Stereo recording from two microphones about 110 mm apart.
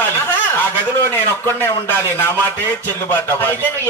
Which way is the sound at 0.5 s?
20° left (ahead or behind).